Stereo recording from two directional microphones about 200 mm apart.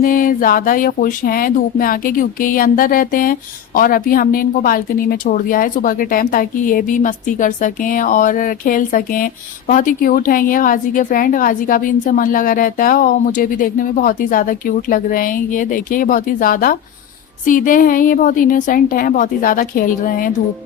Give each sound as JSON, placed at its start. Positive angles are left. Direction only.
{"t": 0.0, "sound": "speech", "side_deg": 45}